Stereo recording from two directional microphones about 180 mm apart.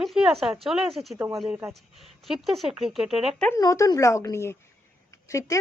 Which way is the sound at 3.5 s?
15° left (ahead or behind).